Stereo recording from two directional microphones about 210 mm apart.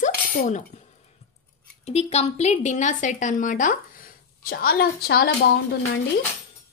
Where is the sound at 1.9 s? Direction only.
30° left (ahead or behind); by 5.3 s 50° left (ahead or behind).